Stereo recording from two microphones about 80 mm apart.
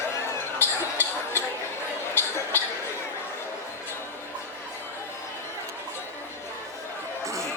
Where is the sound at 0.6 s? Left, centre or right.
Left.